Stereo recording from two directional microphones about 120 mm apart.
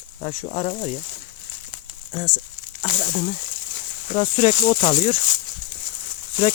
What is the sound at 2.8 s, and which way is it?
Speech, 60° left (ahead or behind).